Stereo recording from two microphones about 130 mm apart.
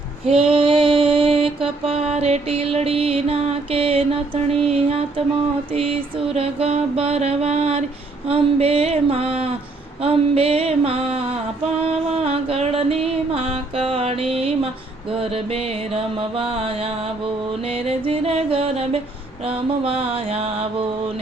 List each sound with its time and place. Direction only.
0.3 s mantra: 45° right (ahead or behind)
12.1 s music: 50° right (ahead or behind)
15.1 s mantra: 50° right (ahead or behind)